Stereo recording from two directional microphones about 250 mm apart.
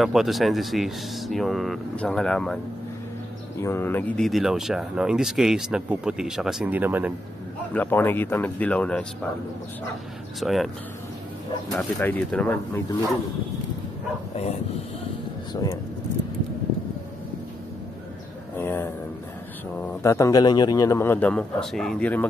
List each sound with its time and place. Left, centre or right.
0.0 s speech: centre
3.6 s speech: centre
7.7 s a man's voice: centre
10.4 s speech: centre
11.7 s a man's voice: centre
15.5 s a man's voice: centre
18.6 s a sound: centre
19.7 s a man's voice: centre